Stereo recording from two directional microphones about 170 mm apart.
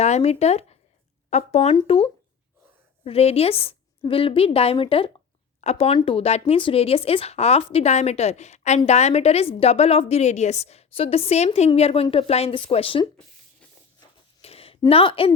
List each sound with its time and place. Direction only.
0.0 s a woman's voice: 40° left (ahead or behind)
14.4 s a sound: 35° left (ahead or behind)
14.8 s a woman's voice: 35° left (ahead or behind)